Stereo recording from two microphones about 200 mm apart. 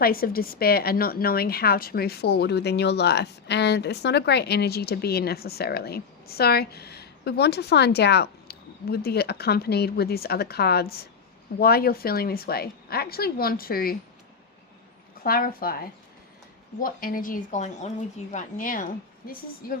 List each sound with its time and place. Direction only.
0.0 s a woman's voice: 45° left (ahead or behind)
15.2 s a woman's voice: 45° left (ahead or behind)